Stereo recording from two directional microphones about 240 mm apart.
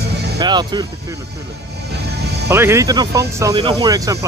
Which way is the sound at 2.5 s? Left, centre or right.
Centre.